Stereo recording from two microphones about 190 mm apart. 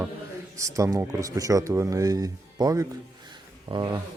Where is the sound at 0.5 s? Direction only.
15° right (ahead or behind).